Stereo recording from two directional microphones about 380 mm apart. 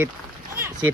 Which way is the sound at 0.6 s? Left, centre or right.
Centre.